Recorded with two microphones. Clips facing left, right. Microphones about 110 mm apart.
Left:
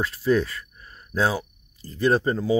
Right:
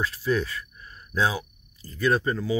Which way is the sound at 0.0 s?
35° left (ahead or behind).